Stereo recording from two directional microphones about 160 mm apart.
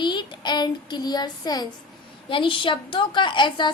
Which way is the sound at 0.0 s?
30° left (ahead or behind).